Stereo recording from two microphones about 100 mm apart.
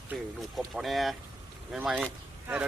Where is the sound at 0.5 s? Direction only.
Centre (ahead or behind).